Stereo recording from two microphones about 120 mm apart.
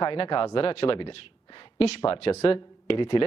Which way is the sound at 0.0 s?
50° left (ahead or behind).